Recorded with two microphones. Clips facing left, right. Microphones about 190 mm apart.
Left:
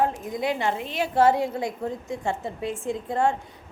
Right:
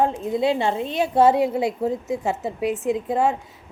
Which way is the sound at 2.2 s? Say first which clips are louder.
Right 3 dB; 5° right (ahead or behind).